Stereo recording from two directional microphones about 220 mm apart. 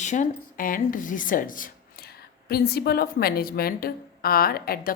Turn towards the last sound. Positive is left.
turn(degrees=45)  # may be behind; listen again after turning